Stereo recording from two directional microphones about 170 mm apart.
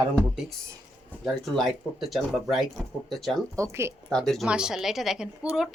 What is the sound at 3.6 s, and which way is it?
Speech, 15° right (ahead or behind).